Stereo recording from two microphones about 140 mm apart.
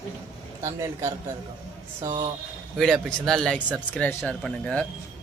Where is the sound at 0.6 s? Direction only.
25° right (ahead or behind).